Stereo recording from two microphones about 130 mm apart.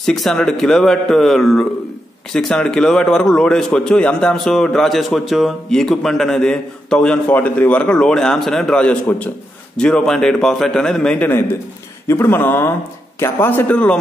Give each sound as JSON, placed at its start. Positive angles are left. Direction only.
{"t": 0.0, "sound": "a man's voice", "side_deg": 5}